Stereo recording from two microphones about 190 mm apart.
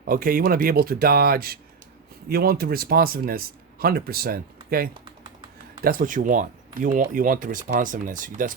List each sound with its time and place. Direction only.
0.1 s speech: 50° right (ahead or behind)